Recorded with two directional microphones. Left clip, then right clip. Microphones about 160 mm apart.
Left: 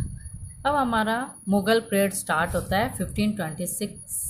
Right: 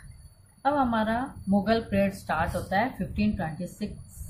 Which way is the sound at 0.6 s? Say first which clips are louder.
Left 2 dB; 45° left (ahead or behind).